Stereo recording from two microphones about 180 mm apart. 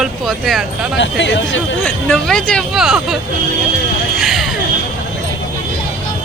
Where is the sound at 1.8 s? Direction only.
5° left (ahead or behind).